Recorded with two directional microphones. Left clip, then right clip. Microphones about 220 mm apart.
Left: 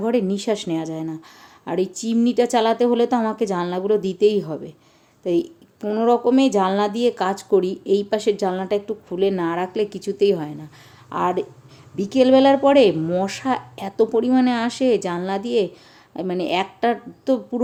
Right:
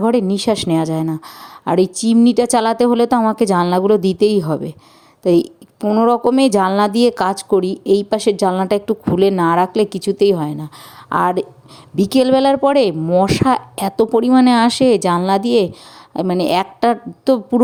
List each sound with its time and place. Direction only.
0.0 s speech: 30° right (ahead or behind)